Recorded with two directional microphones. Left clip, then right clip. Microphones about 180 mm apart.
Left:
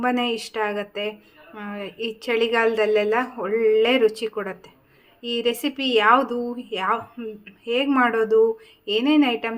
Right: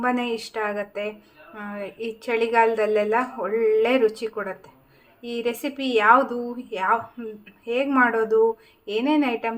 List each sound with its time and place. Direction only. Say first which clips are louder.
0.0 s a woman's voice: left 1 dB; 15° left (ahead or behind)